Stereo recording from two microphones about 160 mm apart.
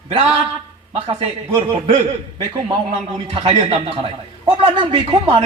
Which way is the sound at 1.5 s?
35° right (ahead or behind).